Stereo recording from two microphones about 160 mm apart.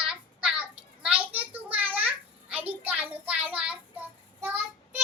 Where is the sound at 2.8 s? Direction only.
10° right (ahead or behind).